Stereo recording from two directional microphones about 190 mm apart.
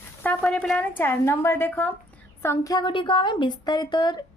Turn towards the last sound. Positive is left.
turn(degrees=20)  # may be behind; listen again after turning